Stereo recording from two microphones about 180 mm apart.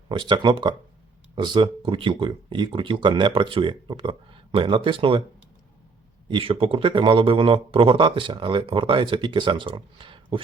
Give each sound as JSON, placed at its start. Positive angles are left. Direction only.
{"t": 0.1, "sound": "speech", "side_deg": -25}
{"t": 6.2, "sound": "speech", "side_deg": -30}